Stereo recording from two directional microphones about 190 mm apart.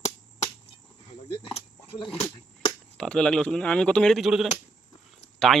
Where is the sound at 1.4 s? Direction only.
25° left (ahead or behind).